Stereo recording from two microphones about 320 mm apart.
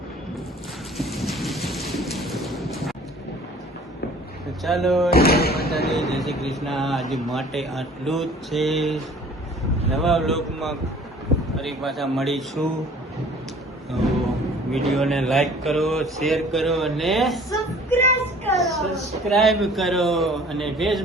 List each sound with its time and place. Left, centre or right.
0.9 s thunder: centre
4.6 s a man's voice: centre
5.1 s a sound: left
5.9 s a man's voice: centre
10.0 s a man's voice: centre
14.7 s a man's voice: centre
17.5 s a sound: centre
18.2 s a man's voice: centre